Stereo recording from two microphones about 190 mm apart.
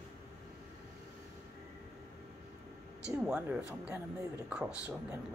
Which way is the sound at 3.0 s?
5° right (ahead or behind).